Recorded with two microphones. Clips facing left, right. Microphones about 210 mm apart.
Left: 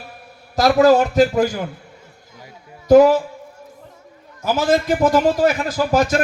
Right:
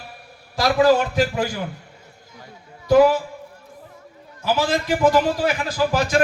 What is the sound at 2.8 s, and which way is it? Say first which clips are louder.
Speech: left 4 dB; 45° left (ahead or behind).